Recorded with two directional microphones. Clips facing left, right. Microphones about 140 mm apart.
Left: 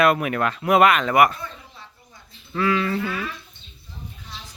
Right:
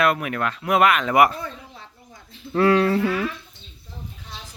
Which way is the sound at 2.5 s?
60° right (ahead or behind).